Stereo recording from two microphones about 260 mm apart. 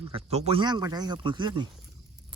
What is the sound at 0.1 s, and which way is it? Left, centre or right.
Speech, right.